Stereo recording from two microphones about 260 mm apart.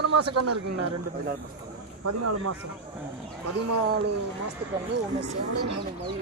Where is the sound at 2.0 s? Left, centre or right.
Right.